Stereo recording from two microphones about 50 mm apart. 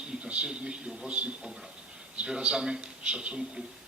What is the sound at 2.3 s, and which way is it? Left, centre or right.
A man's voice, centre.